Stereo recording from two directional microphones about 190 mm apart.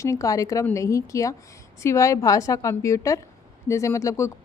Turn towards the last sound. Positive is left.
turn(degrees=15)  # may be behind; listen again after turning